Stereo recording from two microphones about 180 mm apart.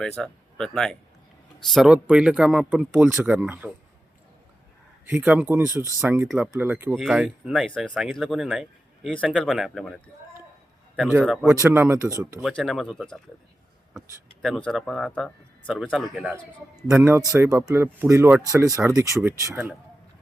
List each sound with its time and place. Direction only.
0.2 s speech: 5° left (ahead or behind)
5.0 s speech: 10° right (ahead or behind)
11.4 s speech: 15° right (ahead or behind)
12.4 s speech: centre (ahead or behind)
14.4 s speech: centre (ahead or behind)
17.0 s speech: 15° right (ahead or behind)